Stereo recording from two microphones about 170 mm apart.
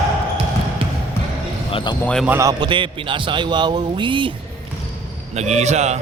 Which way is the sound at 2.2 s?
15° right (ahead or behind).